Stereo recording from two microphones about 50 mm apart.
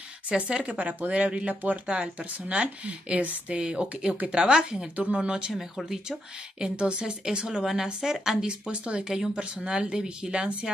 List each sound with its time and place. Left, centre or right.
0.3 s a woman's voice: right
1.5 s a woman's voice: right
5.5 s a woman's voice: centre
6.6 s a woman's voice: centre